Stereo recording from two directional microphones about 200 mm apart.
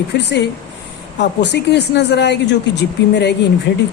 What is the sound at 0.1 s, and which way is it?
A woman's voice, 60° left (ahead or behind).